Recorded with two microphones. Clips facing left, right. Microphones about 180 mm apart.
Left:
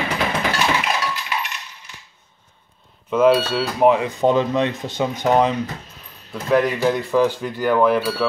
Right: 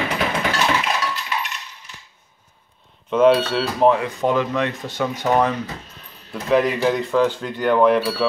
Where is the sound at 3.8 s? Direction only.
20° left (ahead or behind).